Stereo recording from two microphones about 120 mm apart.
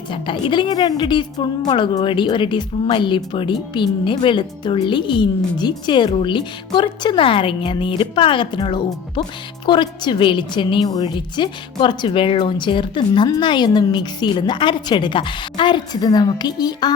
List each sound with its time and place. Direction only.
0.1 s a woman's voice: 45° left (ahead or behind)